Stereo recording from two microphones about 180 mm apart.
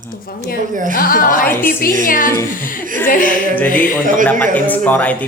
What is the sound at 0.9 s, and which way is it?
A woman's voice, 50° left (ahead or behind).